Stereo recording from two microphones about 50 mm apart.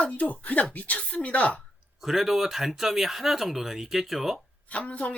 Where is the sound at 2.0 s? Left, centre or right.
Centre.